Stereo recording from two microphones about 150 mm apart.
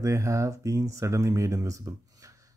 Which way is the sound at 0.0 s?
20° right (ahead or behind).